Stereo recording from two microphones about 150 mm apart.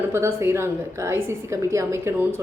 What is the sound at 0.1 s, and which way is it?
A woman's voice, 20° right (ahead or behind).